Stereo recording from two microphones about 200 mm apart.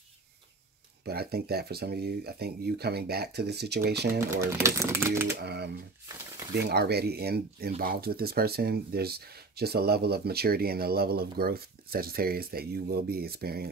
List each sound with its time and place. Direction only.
1.0 s speech: 50° right (ahead or behind)
4.3 s speech: 15° right (ahead or behind)
5.4 s speech: 55° right (ahead or behind)